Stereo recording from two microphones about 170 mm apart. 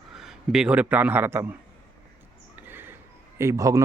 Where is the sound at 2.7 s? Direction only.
10° right (ahead or behind).